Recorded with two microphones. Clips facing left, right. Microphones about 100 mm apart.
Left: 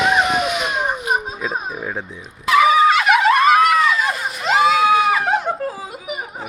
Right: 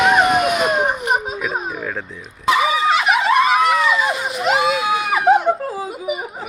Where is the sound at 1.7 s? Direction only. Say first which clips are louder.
Right 1 dB; 15° left (ahead or behind).